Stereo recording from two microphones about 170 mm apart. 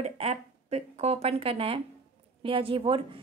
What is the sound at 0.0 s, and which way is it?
A woman's voice, 40° right (ahead or behind).